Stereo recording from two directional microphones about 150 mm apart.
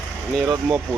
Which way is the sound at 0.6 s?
5° right (ahead or behind).